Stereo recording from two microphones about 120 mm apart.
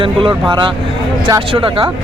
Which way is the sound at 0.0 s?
45° right (ahead or behind).